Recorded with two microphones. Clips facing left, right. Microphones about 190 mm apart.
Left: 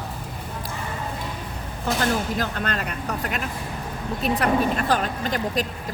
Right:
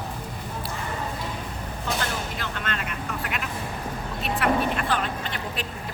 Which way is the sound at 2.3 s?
40° left (ahead or behind).